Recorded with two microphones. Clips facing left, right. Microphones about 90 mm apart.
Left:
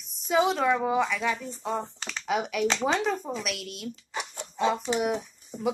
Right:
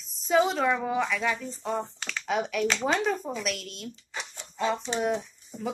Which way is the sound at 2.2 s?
5° left (ahead or behind).